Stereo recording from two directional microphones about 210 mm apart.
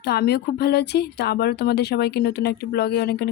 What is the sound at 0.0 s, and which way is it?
Speech, 50° left (ahead or behind).